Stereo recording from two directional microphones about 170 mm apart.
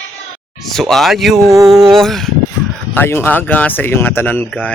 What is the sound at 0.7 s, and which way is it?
Speech, centre (ahead or behind).